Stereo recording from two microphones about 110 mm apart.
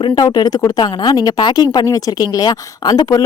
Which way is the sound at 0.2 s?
35° left (ahead or behind).